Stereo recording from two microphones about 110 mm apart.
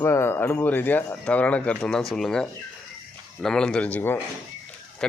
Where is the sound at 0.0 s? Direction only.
20° left (ahead or behind).